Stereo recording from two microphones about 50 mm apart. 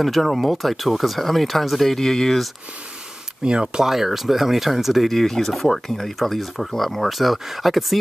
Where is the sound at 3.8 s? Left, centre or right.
Centre.